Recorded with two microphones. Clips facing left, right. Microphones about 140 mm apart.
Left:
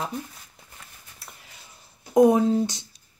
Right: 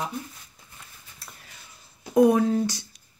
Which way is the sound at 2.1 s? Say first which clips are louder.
Left 1 dB; 20° left (ahead or behind).